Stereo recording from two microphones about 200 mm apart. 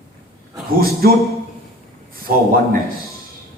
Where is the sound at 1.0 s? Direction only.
50° right (ahead or behind).